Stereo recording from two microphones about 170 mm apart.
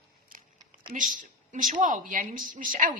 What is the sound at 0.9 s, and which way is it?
Speech, 50° right (ahead or behind).